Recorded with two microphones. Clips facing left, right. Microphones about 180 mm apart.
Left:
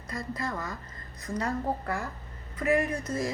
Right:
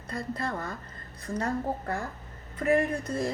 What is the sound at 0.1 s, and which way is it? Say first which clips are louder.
Speech: right 1 dB; 60° right (ahead or behind).